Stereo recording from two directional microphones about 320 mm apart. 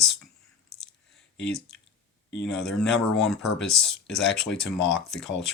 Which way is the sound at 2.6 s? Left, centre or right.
Centre.